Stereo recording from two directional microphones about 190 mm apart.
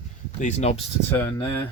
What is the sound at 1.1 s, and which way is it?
Speech, 10° left (ahead or behind).